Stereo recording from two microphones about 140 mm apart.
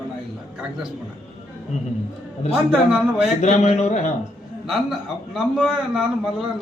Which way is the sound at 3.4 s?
55° left (ahead or behind).